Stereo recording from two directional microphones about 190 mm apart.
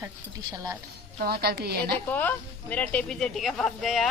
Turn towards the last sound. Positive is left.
turn(degrees=0)  # may be behind; listen again after turning